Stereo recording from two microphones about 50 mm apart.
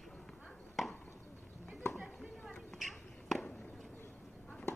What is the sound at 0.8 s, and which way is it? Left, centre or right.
Chop, centre.